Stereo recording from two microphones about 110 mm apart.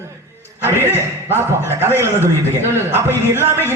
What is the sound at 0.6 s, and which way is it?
A man's voice, 20° right (ahead or behind).